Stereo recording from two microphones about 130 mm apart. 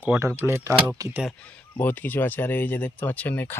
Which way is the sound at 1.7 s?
15° left (ahead or behind).